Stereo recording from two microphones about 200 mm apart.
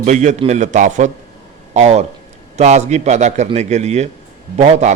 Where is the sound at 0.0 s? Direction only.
35° right (ahead or behind).